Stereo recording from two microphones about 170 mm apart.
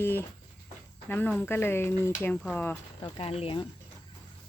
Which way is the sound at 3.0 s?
30° left (ahead or behind).